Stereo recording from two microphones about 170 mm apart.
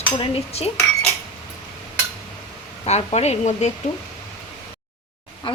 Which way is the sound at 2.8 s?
40° left (ahead or behind).